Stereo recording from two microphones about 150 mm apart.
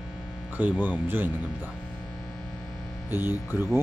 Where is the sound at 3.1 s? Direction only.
15° right (ahead or behind).